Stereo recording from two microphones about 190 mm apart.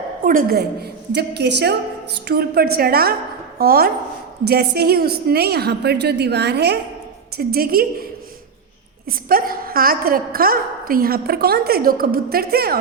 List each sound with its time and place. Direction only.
0.3 s a woman's voice: 50° right (ahead or behind)
9.0 s a woman's voice: 50° right (ahead or behind)